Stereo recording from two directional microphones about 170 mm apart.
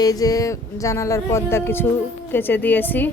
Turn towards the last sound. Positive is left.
turn(degrees=10)  # may be behind; listen again after turning